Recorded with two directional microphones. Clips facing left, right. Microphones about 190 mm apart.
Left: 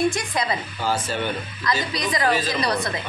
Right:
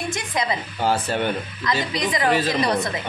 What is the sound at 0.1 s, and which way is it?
Speech, 20° right (ahead or behind).